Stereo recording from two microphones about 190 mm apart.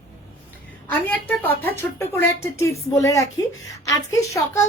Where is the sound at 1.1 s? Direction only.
10° left (ahead or behind).